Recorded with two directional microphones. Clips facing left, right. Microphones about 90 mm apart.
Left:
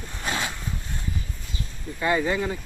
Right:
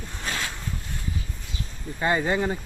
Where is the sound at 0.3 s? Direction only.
20° left (ahead or behind).